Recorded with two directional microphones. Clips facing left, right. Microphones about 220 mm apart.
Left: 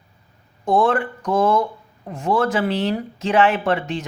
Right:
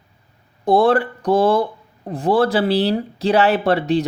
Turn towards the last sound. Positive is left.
turn(degrees=-35)  # may be behind; listen again after turning